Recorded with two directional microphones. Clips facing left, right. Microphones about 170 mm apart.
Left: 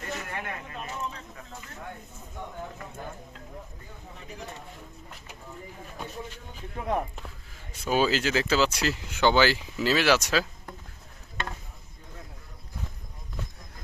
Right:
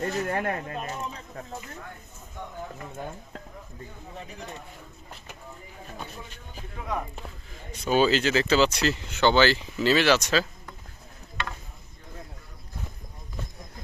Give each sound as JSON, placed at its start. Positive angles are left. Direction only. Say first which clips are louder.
{"t": 0.0, "sound": "speech", "louder": "right 8 dB", "side_deg": -40}
{"t": 7.5, "sound": "speech", "louder": "right 2 dB", "side_deg": 5}
{"t": 11.4, "sound": "a sound", "louder": "even", "side_deg": 45}